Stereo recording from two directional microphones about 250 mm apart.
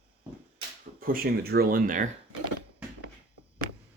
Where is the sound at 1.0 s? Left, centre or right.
Right.